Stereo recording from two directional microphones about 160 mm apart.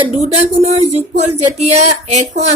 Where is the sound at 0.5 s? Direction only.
45° right (ahead or behind).